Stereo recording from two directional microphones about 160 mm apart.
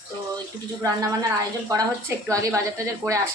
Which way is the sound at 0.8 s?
25° right (ahead or behind).